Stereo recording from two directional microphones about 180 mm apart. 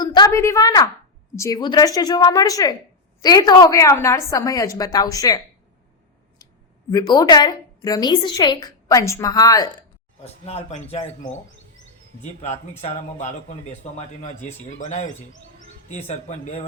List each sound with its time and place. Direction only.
0.0 s a woman's voice: 25° left (ahead or behind)
6.9 s a woman's voice: 20° left (ahead or behind)
10.4 s a man's voice: 35° left (ahead or behind)